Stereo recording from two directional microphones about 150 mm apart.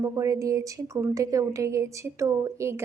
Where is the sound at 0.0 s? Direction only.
20° right (ahead or behind).